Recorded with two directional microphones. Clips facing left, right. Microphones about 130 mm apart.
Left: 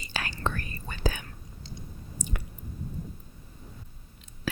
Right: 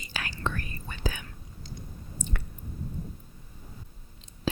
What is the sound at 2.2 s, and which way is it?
Chewing, 10° left (ahead or behind).